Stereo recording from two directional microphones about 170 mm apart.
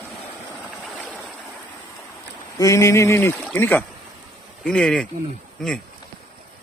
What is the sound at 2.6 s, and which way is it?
Speech, 20° left (ahead or behind).